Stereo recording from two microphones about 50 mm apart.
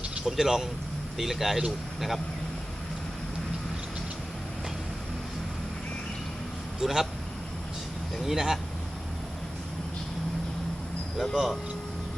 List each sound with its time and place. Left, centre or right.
0.3 s speech: centre
6.7 s speech: centre
8.1 s speech: centre
11.2 s speech: centre